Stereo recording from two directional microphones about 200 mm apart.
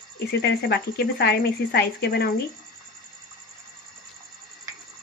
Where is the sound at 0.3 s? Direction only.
50° left (ahead or behind).